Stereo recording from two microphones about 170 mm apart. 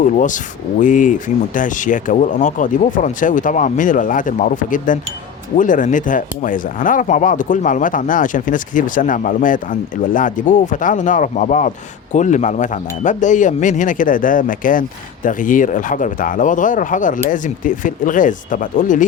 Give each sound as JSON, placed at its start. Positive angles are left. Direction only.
{"t": 0.0, "sound": "speech", "side_deg": 50}